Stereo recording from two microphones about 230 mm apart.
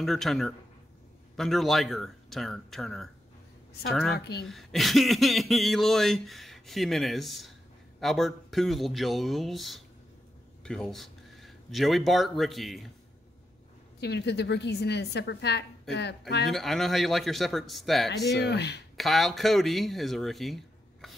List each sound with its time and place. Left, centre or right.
0.0 s speech: centre
4.2 s a woman's voice: left
4.5 s speech: centre
13.9 s a woman's voice: left
16.4 s speech: centre
18.4 s a woman's voice: left
18.9 s speech: centre